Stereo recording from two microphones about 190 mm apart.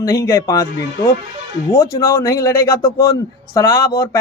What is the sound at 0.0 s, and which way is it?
A man's voice, 20° left (ahead or behind).